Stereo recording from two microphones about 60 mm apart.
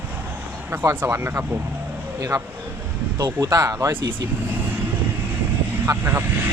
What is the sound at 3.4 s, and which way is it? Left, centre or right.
Speech, right.